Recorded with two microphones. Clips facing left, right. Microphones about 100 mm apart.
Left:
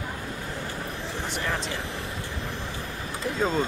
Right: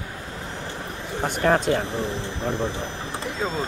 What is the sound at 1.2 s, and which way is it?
Speech, 50° right (ahead or behind).